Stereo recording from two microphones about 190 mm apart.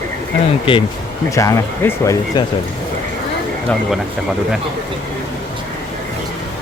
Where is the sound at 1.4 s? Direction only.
15° left (ahead or behind).